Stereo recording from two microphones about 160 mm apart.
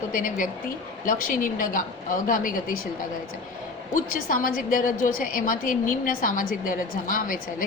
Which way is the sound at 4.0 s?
60° left (ahead or behind).